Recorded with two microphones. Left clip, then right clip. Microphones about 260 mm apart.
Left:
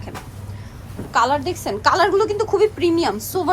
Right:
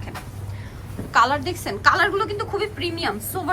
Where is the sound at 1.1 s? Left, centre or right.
Centre.